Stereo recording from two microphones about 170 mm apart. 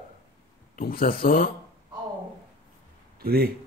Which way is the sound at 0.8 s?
55° left (ahead or behind).